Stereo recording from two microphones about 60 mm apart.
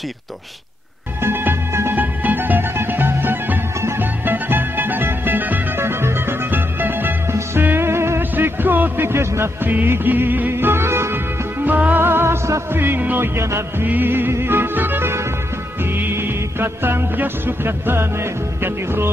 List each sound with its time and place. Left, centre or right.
1.2 s music: right
2.0 s music: right
5.8 s music: right
8.2 s music: right
9.6 s music: right
11.6 s music: right
12.7 s music: right
13.4 s music: right
13.8 s music: right